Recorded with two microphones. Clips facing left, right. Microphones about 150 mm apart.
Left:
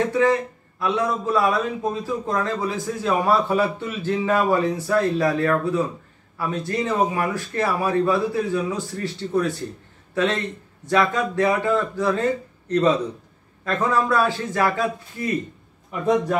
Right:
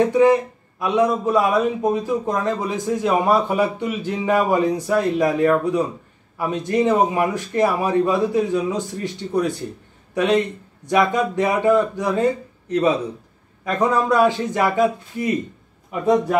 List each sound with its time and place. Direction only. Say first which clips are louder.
0.0 s a man's voice: right 5 dB; 15° right (ahead or behind)